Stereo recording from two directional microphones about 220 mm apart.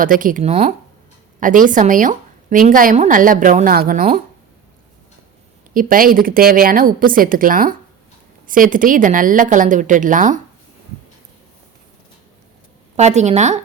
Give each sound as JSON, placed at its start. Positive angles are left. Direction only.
{"t": 0.0, "sound": "a woman's voice", "side_deg": -40}
{"t": 5.7, "sound": "a woman's voice", "side_deg": -40}
{"t": 13.0, "sound": "a woman's voice", "side_deg": -30}